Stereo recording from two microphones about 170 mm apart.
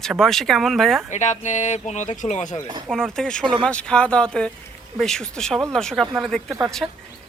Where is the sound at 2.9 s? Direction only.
5° left (ahead or behind).